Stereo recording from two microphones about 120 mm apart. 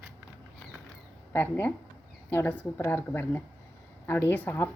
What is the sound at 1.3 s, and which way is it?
A woman's voice, 15° left (ahead or behind).